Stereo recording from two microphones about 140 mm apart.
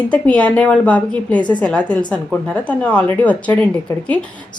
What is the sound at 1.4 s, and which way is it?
Speech, 35° left (ahead or behind).